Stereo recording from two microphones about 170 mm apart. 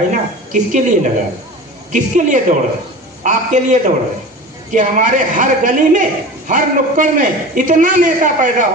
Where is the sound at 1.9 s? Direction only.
50° right (ahead or behind).